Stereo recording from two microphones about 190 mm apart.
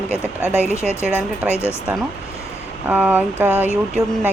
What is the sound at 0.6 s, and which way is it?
A woman's voice, 10° left (ahead or behind).